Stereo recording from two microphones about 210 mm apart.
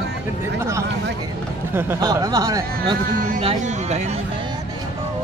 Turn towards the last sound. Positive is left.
turn(degrees=-35)  # may be behind; listen again after turning